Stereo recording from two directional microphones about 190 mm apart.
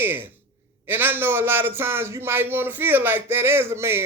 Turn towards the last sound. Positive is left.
turn(degrees=-15)  # may be behind; listen again after turning